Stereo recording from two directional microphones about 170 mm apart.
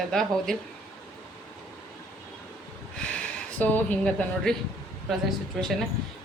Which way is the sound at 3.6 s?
5° left (ahead or behind).